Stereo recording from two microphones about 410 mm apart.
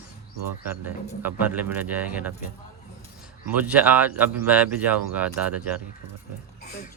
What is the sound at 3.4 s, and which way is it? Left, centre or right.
Speech, centre.